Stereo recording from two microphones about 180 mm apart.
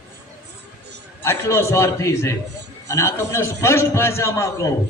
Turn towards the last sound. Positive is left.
turn(degrees=15)  # may be behind; listen again after turning